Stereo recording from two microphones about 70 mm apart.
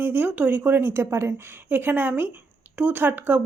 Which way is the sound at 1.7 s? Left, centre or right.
Right.